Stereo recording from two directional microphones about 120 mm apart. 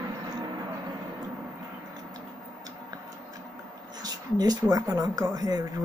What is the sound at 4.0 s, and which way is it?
Speech, 35° right (ahead or behind).